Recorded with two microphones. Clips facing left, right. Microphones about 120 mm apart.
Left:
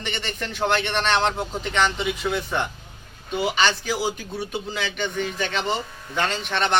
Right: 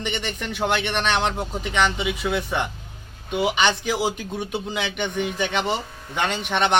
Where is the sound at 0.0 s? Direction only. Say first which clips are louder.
Right 2 dB; 15° right (ahead or behind).